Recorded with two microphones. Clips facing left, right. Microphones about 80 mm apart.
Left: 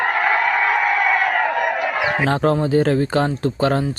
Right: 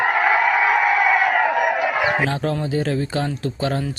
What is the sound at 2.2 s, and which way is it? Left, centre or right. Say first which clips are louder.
Speech: left 5 dB; left.